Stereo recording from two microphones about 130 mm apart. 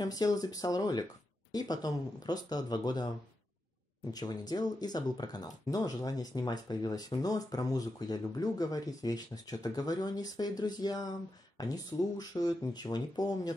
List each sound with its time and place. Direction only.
0.0 s speech: 30° left (ahead or behind)
4.1 s speech: 30° left (ahead or behind)